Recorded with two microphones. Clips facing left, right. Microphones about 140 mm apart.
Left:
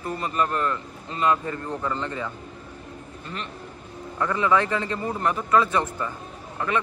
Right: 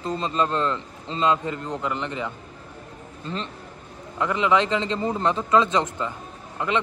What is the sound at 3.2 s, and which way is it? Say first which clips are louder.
Speech: right 5 dB; 30° right (ahead or behind).